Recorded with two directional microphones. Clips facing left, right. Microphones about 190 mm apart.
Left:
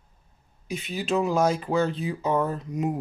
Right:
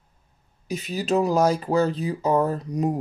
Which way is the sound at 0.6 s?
40° right (ahead or behind).